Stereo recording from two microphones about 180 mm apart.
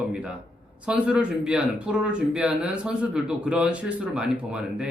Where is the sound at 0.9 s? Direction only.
5° right (ahead or behind).